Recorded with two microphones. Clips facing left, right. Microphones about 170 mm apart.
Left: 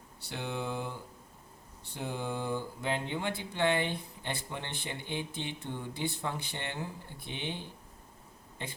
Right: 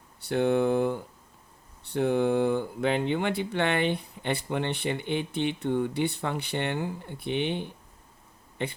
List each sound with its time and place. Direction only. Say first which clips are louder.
0.2 s speech: right 14 dB; 55° right (ahead or behind)